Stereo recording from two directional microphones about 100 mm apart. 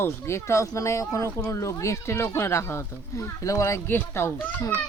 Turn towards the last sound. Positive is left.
turn(degrees=25)  # may be behind; listen again after turning